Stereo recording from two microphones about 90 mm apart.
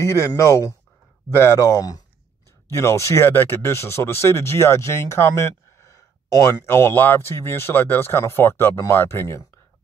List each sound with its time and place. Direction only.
0.0 s speech: 35° left (ahead or behind)
2.7 s speech: 30° left (ahead or behind)